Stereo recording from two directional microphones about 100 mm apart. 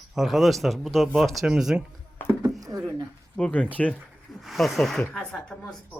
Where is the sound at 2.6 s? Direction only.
40° right (ahead or behind).